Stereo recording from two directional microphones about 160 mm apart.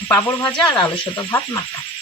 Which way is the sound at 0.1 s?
10° left (ahead or behind).